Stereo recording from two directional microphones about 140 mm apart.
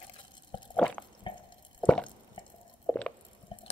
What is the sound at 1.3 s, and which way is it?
Drip, 35° left (ahead or behind).